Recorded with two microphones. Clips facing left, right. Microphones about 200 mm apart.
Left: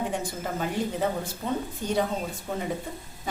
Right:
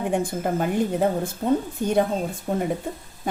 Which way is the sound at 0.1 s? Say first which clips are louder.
Right 7 dB; 55° right (ahead or behind).